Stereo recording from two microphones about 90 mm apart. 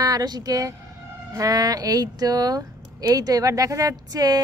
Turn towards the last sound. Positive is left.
turn(degrees=-45)  # may be behind; listen again after turning